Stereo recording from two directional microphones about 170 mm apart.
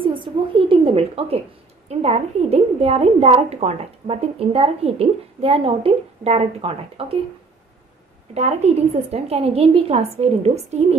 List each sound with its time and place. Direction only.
0.0 s a sound: 30° right (ahead or behind)
1.9 s a woman's voice: 40° right (ahead or behind)
8.4 s a woman's voice: 40° right (ahead or behind)